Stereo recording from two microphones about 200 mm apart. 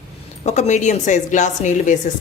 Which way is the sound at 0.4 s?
35° left (ahead or behind).